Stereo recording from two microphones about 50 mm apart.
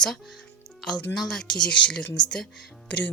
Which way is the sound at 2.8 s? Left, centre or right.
Left.